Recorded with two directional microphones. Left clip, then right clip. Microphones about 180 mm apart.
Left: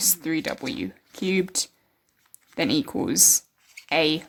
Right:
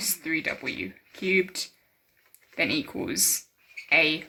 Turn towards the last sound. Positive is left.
turn(degrees=45)  # may be behind; listen again after turning